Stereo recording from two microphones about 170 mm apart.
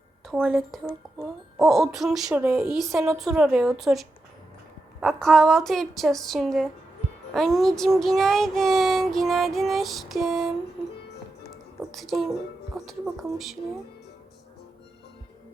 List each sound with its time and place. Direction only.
0.3 s speech: centre (ahead or behind)
11.8 s speech: centre (ahead or behind)